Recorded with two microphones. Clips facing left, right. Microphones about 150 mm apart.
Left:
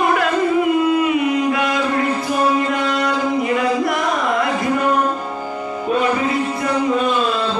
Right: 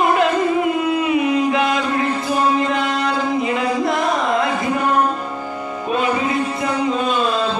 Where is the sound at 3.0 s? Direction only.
25° right (ahead or behind).